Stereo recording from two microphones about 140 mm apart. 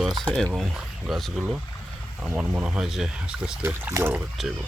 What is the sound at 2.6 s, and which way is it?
Speech, 5° right (ahead or behind).